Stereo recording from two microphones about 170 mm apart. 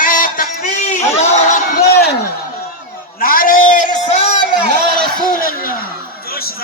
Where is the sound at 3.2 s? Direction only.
55° left (ahead or behind).